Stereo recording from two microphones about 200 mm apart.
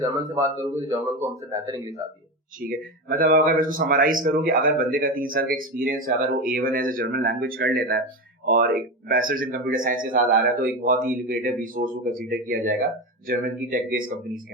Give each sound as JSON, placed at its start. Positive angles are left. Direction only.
{"t": 0.0, "sound": "speech", "side_deg": -15}
{"t": 2.6, "sound": "speech", "side_deg": -45}